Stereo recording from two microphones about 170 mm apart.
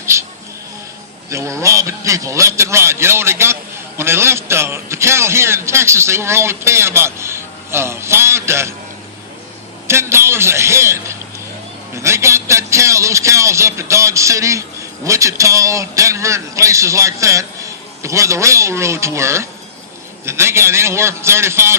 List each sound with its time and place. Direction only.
0.0 s music: 15° right (ahead or behind)
1.3 s a man's voice: 15° right (ahead or behind)
9.8 s a man's voice: 15° right (ahead or behind)